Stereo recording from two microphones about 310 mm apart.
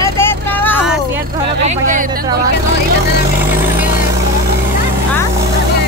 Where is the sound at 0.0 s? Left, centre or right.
Centre.